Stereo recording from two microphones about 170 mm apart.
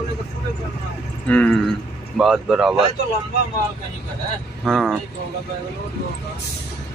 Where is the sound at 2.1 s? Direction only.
5° right (ahead or behind).